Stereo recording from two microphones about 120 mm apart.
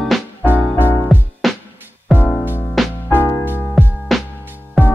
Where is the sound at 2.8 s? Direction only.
Centre (ahead or behind).